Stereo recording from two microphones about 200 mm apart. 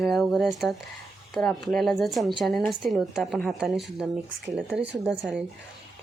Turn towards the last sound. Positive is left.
turn(degrees=-5)  # may be behind; listen again after turning